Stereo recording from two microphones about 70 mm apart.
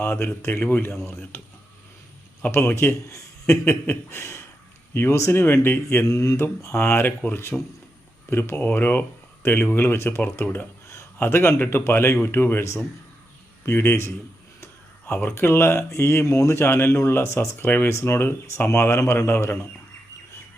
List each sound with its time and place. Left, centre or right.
0.0 s speech: left
2.5 s speech: left
6.1 s speech: left
10.8 s speech: left